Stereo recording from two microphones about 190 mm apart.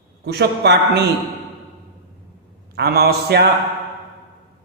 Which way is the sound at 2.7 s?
55° right (ahead or behind).